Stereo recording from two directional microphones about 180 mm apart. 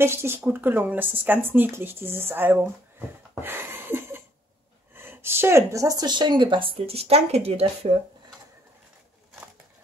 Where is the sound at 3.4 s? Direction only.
10° right (ahead or behind).